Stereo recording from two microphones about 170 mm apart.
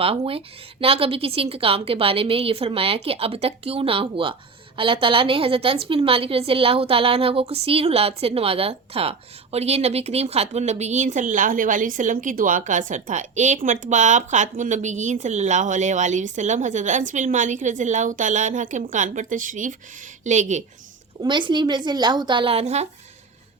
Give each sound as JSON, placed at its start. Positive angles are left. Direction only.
{"t": 0.0, "sound": "a woman's voice", "side_deg": -35}
{"t": 21.2, "sound": "a woman's voice", "side_deg": -30}